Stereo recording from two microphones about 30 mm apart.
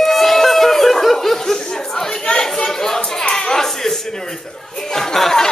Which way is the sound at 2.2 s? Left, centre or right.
Left.